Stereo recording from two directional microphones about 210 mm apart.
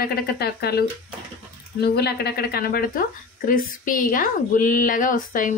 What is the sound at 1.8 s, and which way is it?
A woman's voice, 50° left (ahead or behind).